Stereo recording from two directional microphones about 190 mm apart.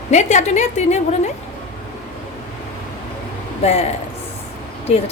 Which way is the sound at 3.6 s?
35° left (ahead or behind).